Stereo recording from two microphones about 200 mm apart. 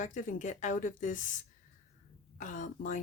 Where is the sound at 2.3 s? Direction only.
40° left (ahead or behind).